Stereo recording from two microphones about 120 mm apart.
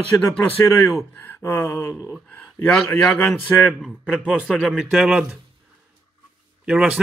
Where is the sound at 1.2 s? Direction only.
15° left (ahead or behind).